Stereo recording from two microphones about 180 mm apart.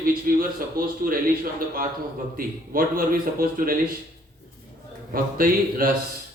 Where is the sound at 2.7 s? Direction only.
55° right (ahead or behind).